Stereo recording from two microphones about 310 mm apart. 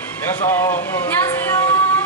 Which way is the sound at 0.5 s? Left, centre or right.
Centre.